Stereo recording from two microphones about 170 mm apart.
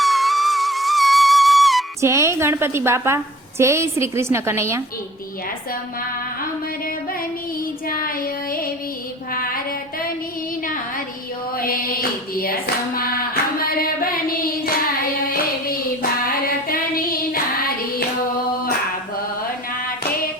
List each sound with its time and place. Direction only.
0.0 s music: centre (ahead or behind)
2.0 s a woman's voice: 15° right (ahead or behind)
9.3 s a sound: 55° left (ahead or behind)
11.5 s a sound: 60° left (ahead or behind)
13.0 s child singing: 60° left (ahead or behind)
15.3 s hands: 60° left (ahead or behind)
16.2 s female singing: 60° left (ahead or behind)